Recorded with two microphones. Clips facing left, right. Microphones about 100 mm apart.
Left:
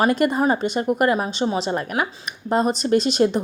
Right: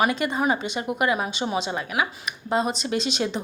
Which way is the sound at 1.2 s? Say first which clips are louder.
Left 4 dB; 35° left (ahead or behind).